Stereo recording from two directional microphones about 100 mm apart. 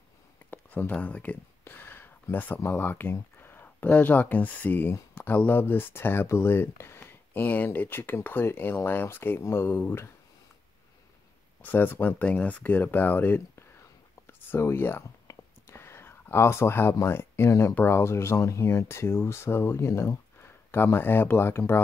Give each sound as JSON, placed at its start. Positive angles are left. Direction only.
{"t": 0.5, "sound": "speech", "side_deg": 15}
{"t": 11.6, "sound": "speech", "side_deg": 20}
{"t": 14.2, "sound": "whispering", "side_deg": 25}
{"t": 16.9, "sound": "speech", "side_deg": 25}